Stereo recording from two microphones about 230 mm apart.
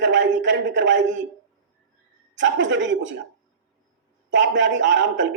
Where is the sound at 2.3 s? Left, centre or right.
Right.